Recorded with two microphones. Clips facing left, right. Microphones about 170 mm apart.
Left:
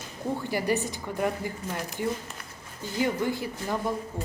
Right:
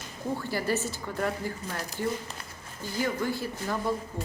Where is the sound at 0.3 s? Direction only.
15° left (ahead or behind).